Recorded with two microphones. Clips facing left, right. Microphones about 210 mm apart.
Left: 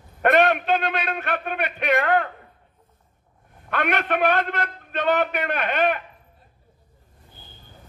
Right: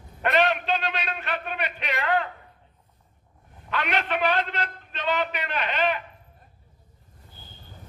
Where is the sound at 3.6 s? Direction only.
55° left (ahead or behind).